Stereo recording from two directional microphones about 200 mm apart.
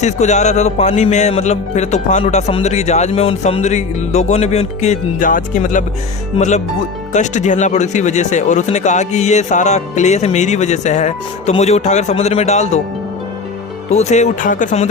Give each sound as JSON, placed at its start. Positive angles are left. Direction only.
{"t": 0.0, "sound": "speech", "side_deg": 35}
{"t": 13.9, "sound": "speech", "side_deg": 35}